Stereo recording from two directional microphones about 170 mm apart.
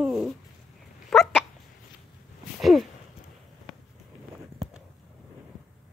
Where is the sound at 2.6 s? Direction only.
Centre (ahead or behind).